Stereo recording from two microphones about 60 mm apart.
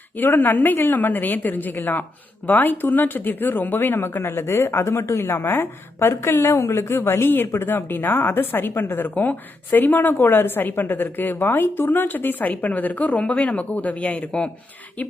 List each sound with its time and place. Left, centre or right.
0.2 s a woman's voice: left